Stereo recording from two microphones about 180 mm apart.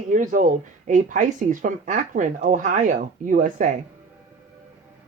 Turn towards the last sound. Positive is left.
turn(degrees=-45)  # may be behind; listen again after turning